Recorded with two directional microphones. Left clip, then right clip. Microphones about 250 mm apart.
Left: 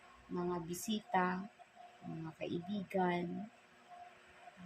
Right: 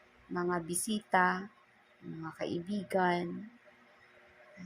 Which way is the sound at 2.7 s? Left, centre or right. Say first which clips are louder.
Right 6 dB; centre.